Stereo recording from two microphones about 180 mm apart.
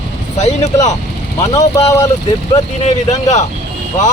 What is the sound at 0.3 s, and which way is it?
Speech, 35° left (ahead or behind).